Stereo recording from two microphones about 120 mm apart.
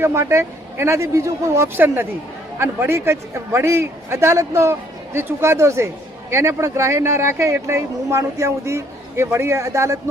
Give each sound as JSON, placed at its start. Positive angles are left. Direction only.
{"t": 0.0, "sound": "speech", "side_deg": -20}